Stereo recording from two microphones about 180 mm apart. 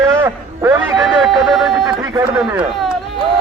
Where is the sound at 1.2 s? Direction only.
Centre (ahead or behind).